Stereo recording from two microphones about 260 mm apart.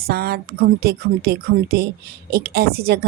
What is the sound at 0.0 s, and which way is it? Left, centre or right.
Speech, right.